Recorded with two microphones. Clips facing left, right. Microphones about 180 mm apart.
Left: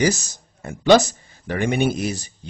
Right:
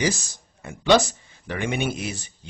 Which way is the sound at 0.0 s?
40° left (ahead or behind).